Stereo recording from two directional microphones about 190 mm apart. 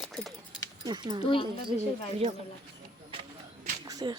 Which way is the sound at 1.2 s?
30° left (ahead or behind).